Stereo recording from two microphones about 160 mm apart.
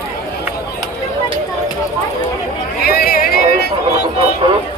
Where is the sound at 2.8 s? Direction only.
70° left (ahead or behind).